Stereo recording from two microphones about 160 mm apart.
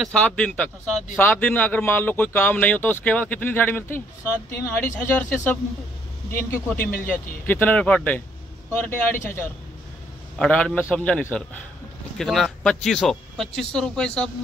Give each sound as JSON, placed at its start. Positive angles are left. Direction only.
{"t": 0.0, "sound": "speech", "side_deg": 5}